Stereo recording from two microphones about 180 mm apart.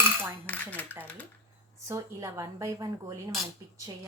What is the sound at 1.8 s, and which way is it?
Speech, 15° right (ahead or behind).